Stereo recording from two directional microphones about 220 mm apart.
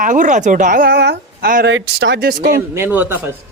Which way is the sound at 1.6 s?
60° right (ahead or behind).